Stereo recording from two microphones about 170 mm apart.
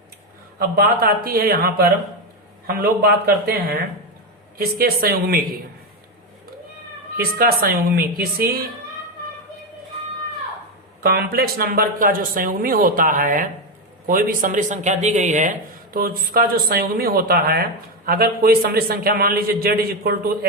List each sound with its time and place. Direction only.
0.8 s speech: 60° right (ahead or behind)
7.2 s speech: 60° right (ahead or behind)
11.0 s speech: 65° right (ahead or behind)